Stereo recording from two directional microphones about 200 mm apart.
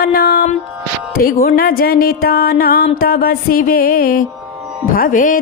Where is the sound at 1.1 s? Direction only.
45° left (ahead or behind).